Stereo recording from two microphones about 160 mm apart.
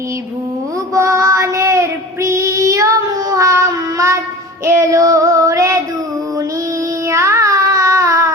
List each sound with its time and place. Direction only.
0.9 s child singing: 20° right (ahead or behind)
7.1 s child singing: 20° right (ahead or behind)